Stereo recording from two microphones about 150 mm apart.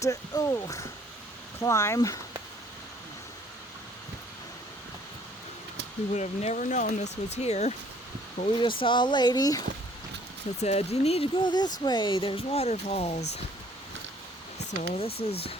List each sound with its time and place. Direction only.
0.0 s speech: 20° left (ahead or behind)
6.1 s speech: 50° left (ahead or behind)
8.4 s speech: 35° left (ahead or behind)
10.6 s speech: 45° left (ahead or behind)
14.8 s speech: 40° left (ahead or behind)